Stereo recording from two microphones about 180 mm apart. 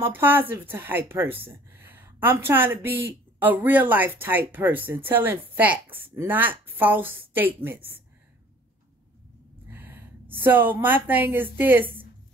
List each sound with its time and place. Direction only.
0.0 s a woman's voice: 10° right (ahead or behind)
9.7 s a sound: 10° right (ahead or behind)
10.4 s a woman's voice: 10° right (ahead or behind)